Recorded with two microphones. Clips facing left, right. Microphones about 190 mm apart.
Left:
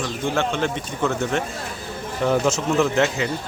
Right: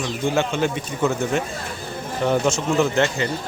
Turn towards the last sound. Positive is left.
turn(degrees=0)  # may be behind; listen again after turning